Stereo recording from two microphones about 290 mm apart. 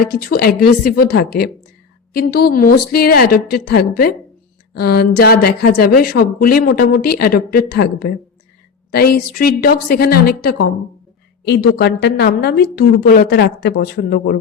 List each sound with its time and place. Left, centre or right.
0.0 s speech: left